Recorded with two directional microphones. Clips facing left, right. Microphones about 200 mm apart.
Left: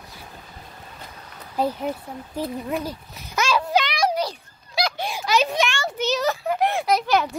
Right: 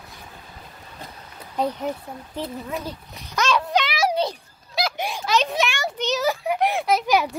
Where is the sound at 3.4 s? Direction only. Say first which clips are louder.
Even; 5° left (ahead or behind).